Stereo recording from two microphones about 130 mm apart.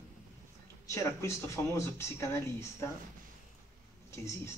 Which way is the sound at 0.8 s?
20° left (ahead or behind).